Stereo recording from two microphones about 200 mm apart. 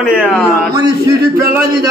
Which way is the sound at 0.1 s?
10° left (ahead or behind).